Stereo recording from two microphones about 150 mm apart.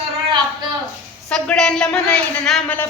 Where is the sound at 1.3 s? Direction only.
5° left (ahead or behind).